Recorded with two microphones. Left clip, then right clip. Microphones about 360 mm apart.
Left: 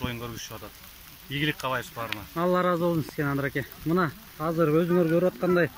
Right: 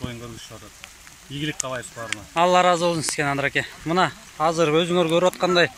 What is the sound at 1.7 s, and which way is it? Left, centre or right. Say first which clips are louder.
Speech: right 1 dB; centre.